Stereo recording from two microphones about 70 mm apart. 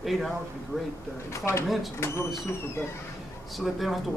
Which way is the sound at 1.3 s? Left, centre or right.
Left.